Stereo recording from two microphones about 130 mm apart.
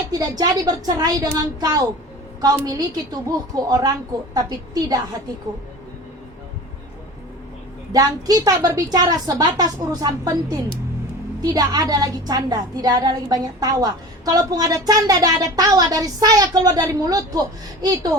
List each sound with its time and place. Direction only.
0.1 s a woman's voice: 30° right (ahead or behind)
7.9 s a woman's voice: 30° right (ahead or behind)